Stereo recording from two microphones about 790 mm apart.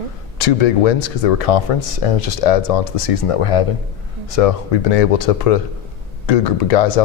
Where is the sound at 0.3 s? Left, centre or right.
Left.